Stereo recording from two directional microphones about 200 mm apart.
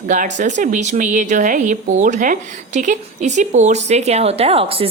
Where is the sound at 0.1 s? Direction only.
40° right (ahead or behind).